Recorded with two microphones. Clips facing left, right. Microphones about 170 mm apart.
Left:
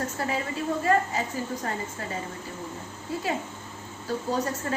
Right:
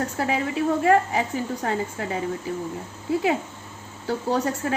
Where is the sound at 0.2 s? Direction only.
65° right (ahead or behind).